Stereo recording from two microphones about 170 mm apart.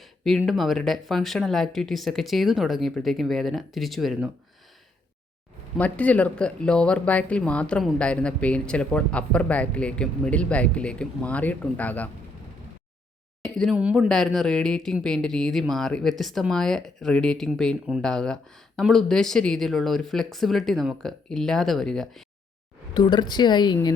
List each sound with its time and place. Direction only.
0.0 s speech: centre (ahead or behind)
5.7 s speech: 10° left (ahead or behind)
13.4 s speech: centre (ahead or behind)
23.0 s a woman's voice: 25° left (ahead or behind)